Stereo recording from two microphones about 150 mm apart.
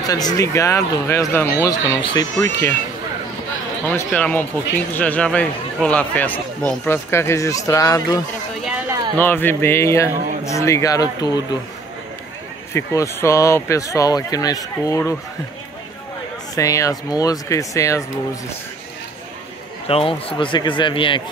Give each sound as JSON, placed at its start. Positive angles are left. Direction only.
{"t": 0.0, "sound": "speech", "side_deg": 25}
{"t": 3.8, "sound": "speech", "side_deg": 15}
{"t": 7.1, "sound": "speech", "side_deg": 20}
{"t": 8.6, "sound": "a sound", "side_deg": -10}
{"t": 9.2, "sound": "speech", "side_deg": 15}
{"t": 12.7, "sound": "speech", "side_deg": 20}
{"t": 16.5, "sound": "speech", "side_deg": 20}
{"t": 19.9, "sound": "speech", "side_deg": 40}